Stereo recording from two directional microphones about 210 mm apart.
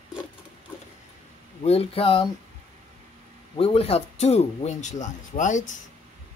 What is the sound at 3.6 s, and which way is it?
Speech, 25° left (ahead or behind).